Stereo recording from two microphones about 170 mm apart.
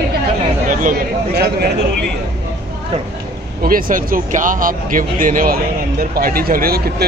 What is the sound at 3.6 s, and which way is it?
Speech, 55° right (ahead or behind).